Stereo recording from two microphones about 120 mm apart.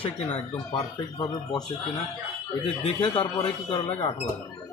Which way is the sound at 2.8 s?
50° left (ahead or behind).